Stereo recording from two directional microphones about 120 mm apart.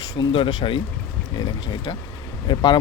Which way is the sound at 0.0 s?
40° left (ahead or behind).